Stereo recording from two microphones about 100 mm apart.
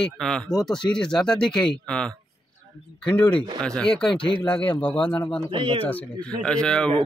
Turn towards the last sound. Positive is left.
turn(degrees=10)  # may be behind; listen again after turning